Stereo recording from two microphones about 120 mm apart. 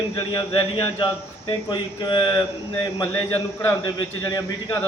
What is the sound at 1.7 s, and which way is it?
Speech, 40° left (ahead or behind).